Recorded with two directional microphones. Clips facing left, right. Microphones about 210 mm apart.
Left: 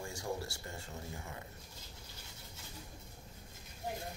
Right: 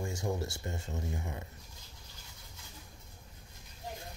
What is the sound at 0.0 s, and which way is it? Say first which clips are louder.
Speech: right 5 dB; 20° right (ahead or behind).